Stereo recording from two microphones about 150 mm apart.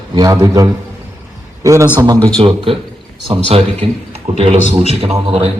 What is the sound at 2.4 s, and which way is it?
A man's voice, 35° right (ahead or behind).